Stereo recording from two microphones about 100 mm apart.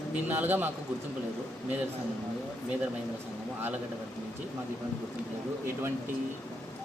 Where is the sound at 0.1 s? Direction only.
20° right (ahead or behind).